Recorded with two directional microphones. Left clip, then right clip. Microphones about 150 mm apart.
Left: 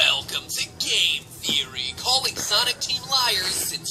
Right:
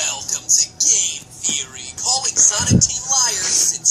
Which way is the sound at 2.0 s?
20° left (ahead or behind).